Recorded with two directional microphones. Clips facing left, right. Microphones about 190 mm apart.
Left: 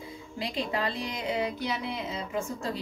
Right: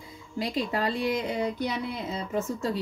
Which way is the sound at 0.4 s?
40° right (ahead or behind).